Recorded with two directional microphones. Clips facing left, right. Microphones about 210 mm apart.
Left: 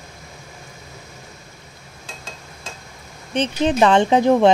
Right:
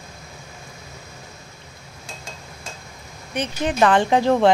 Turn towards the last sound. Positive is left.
turn(degrees=20)  # may be behind; listen again after turning